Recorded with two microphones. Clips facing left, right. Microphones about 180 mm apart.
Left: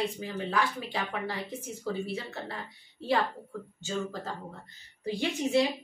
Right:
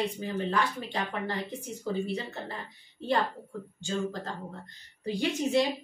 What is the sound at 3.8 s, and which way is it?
Speech, 5° left (ahead or behind).